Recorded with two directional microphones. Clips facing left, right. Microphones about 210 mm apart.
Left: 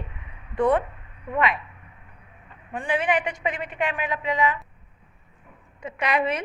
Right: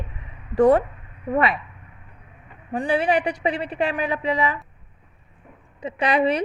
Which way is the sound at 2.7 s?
35° right (ahead or behind).